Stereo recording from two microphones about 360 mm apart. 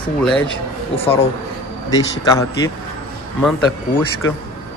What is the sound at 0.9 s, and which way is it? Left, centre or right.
Speech, centre.